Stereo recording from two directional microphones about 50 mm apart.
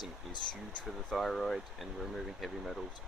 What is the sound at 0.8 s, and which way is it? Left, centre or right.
Speech, centre.